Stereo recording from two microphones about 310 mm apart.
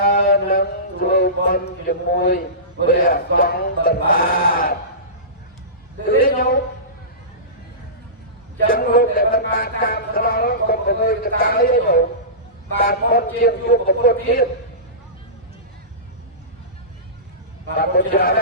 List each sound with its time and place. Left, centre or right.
0.0 s a man's voice: left
6.1 s a man's voice: left
8.6 s a man's voice: left
17.7 s a man's voice: left